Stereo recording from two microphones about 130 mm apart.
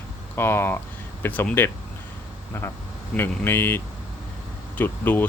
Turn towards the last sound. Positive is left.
turn(degrees=15)  # may be behind; listen again after turning